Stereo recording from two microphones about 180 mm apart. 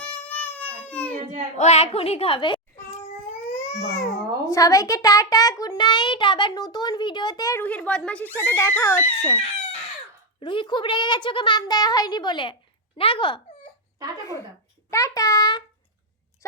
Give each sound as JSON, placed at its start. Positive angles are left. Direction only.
{"t": 0.0, "sound": "baby cry", "side_deg": 10}
{"t": 1.5, "sound": "a child's voice", "side_deg": 35}
{"t": 3.5, "sound": "babbling", "side_deg": 40}
{"t": 4.4, "sound": "a child's voice", "side_deg": 20}
{"t": 10.4, "sound": "a child's voice", "side_deg": 25}
{"t": 14.8, "sound": "a child's voice", "side_deg": 20}